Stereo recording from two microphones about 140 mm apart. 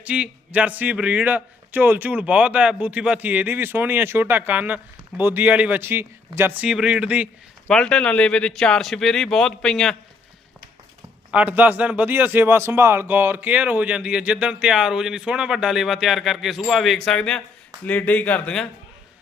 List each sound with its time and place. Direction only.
0.0 s a man's voice: 10° right (ahead or behind)
7.7 s speech: 5° left (ahead or behind)
11.3 s a man's voice: 10° right (ahead or behind); by 18.7 s 5° left (ahead or behind)